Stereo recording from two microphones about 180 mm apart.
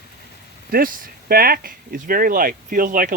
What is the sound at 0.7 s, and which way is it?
Speech, 55° right (ahead or behind).